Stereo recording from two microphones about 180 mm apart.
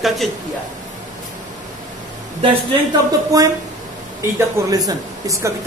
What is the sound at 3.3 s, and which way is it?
Speech, 20° right (ahead or behind).